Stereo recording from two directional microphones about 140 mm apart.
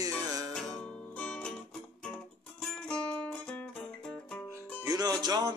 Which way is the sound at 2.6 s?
5° left (ahead or behind).